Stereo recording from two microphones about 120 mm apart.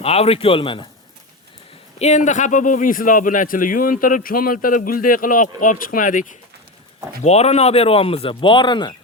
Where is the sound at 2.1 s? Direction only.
90° left.